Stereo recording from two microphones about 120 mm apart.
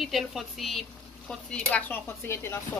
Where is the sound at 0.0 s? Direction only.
Centre (ahead or behind).